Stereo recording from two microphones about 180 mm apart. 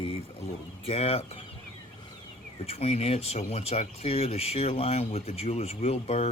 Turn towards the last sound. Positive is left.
turn(degrees=35)  # may be behind; listen again after turning